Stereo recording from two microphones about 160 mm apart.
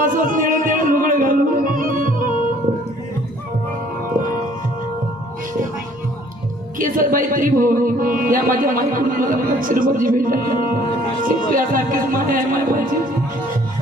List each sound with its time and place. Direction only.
0.0 s music: 60° right (ahead or behind)
6.7 s speech: 60° right (ahead or behind)